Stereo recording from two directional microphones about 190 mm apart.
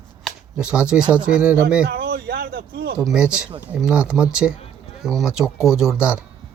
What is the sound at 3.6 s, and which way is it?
Speech, 5° right (ahead or behind).